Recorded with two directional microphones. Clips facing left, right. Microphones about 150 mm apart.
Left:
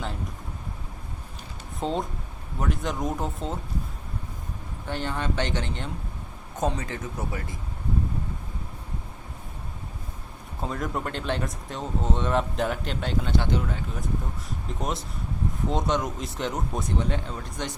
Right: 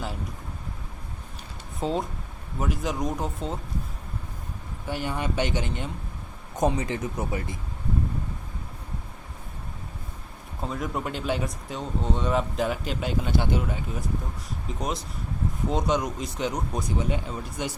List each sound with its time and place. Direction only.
1.8 s speech: centre (ahead or behind)
4.9 s speech: 10° right (ahead or behind)
10.6 s speech: centre (ahead or behind)
14.7 s speech: centre (ahead or behind)